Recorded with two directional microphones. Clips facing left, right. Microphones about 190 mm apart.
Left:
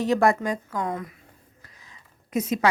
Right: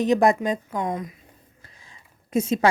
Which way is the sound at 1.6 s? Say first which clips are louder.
Even; 30° right (ahead or behind).